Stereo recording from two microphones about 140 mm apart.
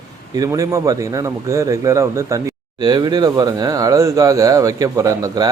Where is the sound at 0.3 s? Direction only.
25° right (ahead or behind).